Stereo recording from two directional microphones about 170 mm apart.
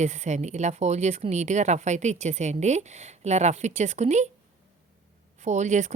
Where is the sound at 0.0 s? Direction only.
40° right (ahead or behind).